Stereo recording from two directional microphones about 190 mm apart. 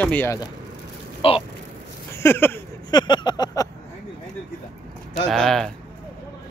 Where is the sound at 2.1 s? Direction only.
10° left (ahead or behind).